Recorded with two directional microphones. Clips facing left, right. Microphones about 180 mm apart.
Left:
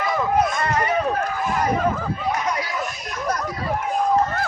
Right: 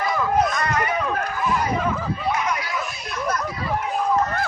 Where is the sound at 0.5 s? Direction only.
30° left (ahead or behind).